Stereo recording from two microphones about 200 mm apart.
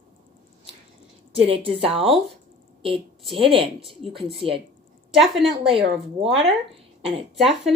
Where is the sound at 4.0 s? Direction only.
Centre (ahead or behind).